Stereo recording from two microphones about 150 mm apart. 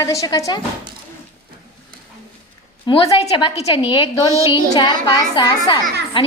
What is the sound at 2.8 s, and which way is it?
A woman's voice, 35° left (ahead or behind).